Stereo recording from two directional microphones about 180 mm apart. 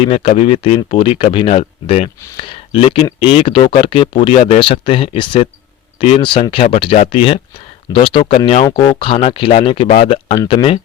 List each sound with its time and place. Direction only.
0.0 s speech: 35° left (ahead or behind)